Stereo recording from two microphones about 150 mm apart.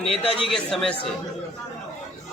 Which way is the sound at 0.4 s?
5° left (ahead or behind).